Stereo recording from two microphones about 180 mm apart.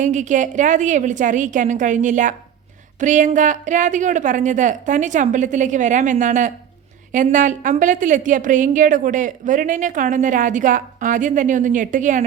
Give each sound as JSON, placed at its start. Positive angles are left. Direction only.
{"t": 0.0, "sound": "a woman's voice", "side_deg": -45}